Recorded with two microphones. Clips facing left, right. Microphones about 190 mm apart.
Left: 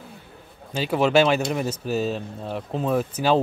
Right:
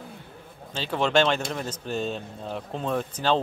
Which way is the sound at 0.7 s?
10° left (ahead or behind).